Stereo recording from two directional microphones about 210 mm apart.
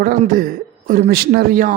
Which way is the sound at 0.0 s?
40° right (ahead or behind).